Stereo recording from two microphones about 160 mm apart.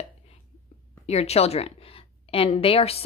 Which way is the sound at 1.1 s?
40° left (ahead or behind).